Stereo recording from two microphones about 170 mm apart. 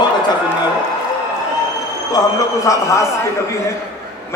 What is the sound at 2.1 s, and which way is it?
Speech, 20° left (ahead or behind).